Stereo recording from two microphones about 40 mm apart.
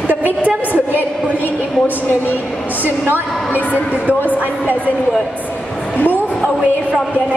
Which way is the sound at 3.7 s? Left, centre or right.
Right.